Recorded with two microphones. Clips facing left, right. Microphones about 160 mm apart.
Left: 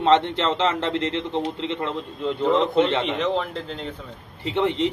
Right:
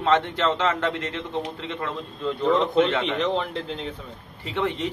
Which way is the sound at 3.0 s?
Centre (ahead or behind).